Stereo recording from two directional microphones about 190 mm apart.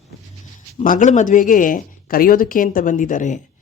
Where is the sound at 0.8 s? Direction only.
40° left (ahead or behind).